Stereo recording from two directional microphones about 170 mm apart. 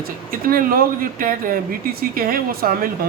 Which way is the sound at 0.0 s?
55° right (ahead or behind).